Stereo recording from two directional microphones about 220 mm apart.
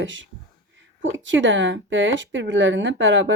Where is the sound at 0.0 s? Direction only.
55° right (ahead or behind).